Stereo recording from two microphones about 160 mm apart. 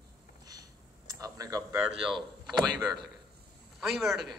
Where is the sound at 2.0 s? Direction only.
Centre (ahead or behind).